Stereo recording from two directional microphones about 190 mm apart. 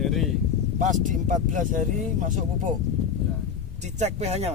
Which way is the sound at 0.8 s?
40° right (ahead or behind).